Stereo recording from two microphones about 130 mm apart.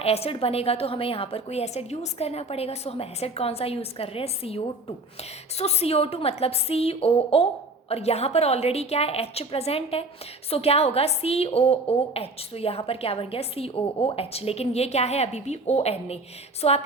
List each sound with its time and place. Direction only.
0.0 s a woman's voice: 50° left (ahead or behind)